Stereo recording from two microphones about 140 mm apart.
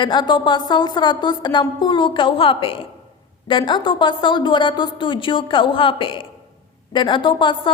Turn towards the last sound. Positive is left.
turn(degrees=35)  # may be behind; listen again after turning